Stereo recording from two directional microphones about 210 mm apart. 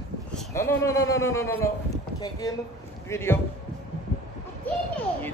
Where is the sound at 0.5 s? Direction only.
15° left (ahead or behind).